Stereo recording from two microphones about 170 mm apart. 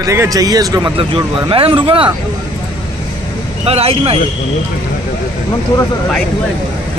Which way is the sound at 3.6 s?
35° right (ahead or behind).